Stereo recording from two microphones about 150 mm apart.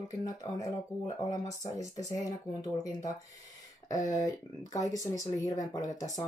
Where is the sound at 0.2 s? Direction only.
25° left (ahead or behind).